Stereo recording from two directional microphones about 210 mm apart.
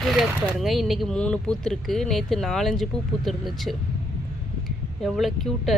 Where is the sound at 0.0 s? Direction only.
Centre (ahead or behind).